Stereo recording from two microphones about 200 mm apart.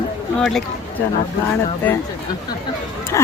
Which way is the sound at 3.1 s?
15° left (ahead or behind).